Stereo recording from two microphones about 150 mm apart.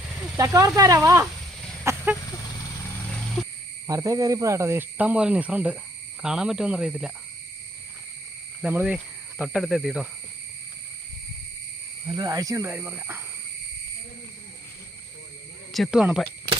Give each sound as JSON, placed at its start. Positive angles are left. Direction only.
{"t": 0.3, "sound": "speech", "side_deg": -20}
{"t": 1.8, "sound": "a sound", "side_deg": -15}
{"t": 3.4, "sound": "insect", "side_deg": 0}
{"t": 3.8, "sound": "speech", "side_deg": -20}
{"t": 8.6, "sound": "speech", "side_deg": -10}
{"t": 12.0, "sound": "speech", "side_deg": -30}
{"t": 15.7, "sound": "speech", "side_deg": 0}